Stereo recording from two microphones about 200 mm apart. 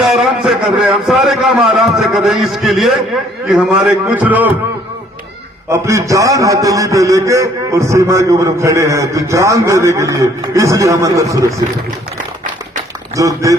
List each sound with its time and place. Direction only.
0.0 s a man's voice: centre (ahead or behind)
5.6 s a man's voice: 15° right (ahead or behind)
13.1 s a man's voice: 15° right (ahead or behind)